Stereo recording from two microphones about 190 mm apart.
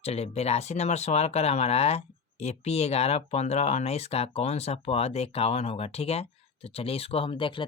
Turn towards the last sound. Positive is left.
turn(degrees=25)  # may be behind; listen again after turning